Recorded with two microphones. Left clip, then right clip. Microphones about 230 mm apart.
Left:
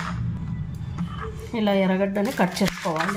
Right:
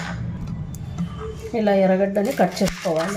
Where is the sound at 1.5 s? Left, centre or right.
Centre.